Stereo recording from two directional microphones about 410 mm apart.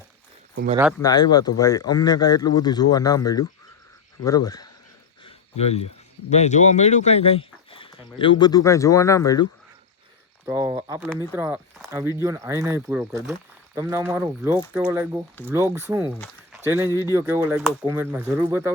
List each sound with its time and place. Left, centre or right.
0.5 s speech: right
1.0 s speech: centre
5.2 s cricket: centre
6.3 s speech: centre
10.4 s speech: centre